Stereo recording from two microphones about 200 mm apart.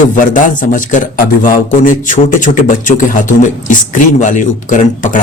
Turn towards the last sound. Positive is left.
turn(degrees=40)  # may be behind; listen again after turning